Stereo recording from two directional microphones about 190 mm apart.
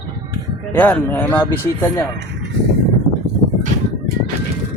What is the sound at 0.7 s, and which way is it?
Speech, 10° left (ahead or behind).